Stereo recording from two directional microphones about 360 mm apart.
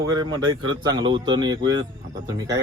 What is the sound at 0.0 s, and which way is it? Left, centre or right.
Speech, centre.